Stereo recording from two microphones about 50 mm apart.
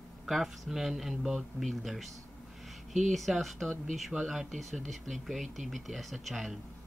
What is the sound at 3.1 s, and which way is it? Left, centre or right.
Speech, centre.